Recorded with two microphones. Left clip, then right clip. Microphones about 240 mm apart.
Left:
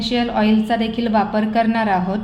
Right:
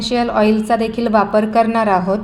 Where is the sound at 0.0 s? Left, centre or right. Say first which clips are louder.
Right 4 dB; centre.